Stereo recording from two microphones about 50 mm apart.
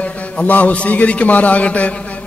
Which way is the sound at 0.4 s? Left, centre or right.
Left.